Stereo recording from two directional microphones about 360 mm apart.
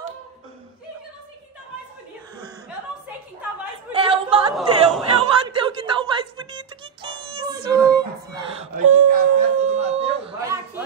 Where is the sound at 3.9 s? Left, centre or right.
Centre.